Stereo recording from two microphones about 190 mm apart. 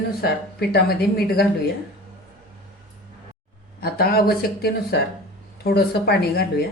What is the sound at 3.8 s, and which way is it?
Speech, 55° left (ahead or behind).